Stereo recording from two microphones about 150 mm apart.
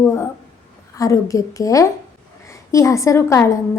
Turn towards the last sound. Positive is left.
turn(degrees=20)  # may be behind; listen again after turning